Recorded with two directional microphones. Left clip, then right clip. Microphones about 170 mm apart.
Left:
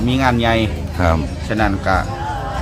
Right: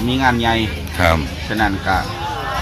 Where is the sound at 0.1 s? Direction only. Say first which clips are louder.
Even; 15° left (ahead or behind).